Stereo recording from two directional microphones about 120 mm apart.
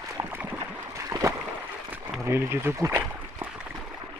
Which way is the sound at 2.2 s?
20° right (ahead or behind).